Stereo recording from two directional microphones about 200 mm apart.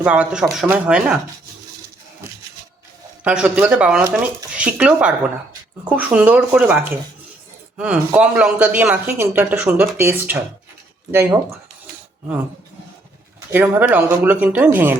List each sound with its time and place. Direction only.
0.0 s speech: 5° right (ahead or behind)
3.2 s speech: 5° right (ahead or behind)
13.5 s speech: 10° right (ahead or behind)